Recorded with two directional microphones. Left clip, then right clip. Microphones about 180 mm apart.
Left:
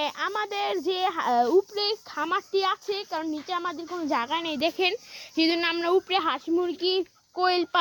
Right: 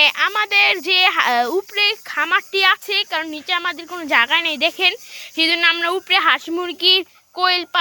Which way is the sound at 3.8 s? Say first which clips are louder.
Right 3 dB; 15° right (ahead or behind).